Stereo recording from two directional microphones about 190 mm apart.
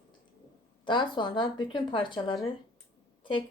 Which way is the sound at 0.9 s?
25° left (ahead or behind).